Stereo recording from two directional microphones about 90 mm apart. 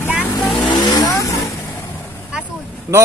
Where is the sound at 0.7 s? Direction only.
50° left (ahead or behind).